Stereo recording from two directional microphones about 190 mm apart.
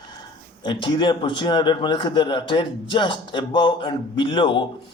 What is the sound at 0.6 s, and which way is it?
A man's voice, 25° left (ahead or behind).